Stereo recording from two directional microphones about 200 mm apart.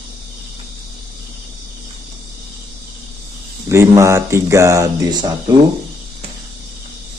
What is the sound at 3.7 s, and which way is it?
Speech, 15° right (ahead or behind).